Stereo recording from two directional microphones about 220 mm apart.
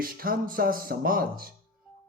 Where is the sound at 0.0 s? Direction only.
40° right (ahead or behind).